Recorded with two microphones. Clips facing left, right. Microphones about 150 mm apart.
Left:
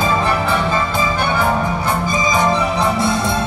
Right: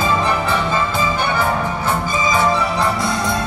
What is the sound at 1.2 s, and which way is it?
Music, 10° left (ahead or behind).